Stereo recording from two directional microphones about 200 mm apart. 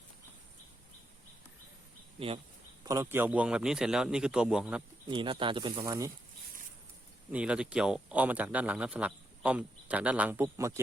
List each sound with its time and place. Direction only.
2.1 s speech: 30° right (ahead or behind)
2.8 s a man's voice: 15° right (ahead or behind)
5.0 s speech: 25° right (ahead or behind)
7.3 s a man's voice: 5° right (ahead or behind)